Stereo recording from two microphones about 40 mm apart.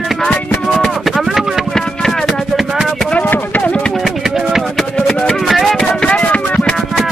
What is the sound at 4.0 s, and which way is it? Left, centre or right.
Music, centre.